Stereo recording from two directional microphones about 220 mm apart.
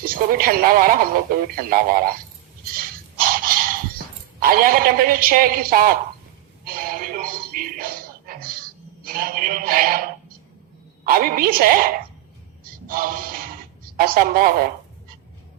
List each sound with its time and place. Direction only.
0.0 s speech: 40° right (ahead or behind)
3.2 s a sound: 40° right (ahead or behind)
6.7 s music: 40° right (ahead or behind)
9.0 s speech: 40° right (ahead or behind)
11.0 s speech: 40° right (ahead or behind)
12.9 s a sound: 40° right (ahead or behind)
13.9 s speech: 40° right (ahead or behind)